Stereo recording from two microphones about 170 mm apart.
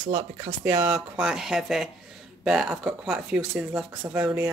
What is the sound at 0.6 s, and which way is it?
Speech, 10° right (ahead or behind).